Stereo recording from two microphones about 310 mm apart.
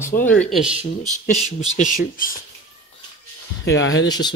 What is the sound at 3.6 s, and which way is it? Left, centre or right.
Speech, left.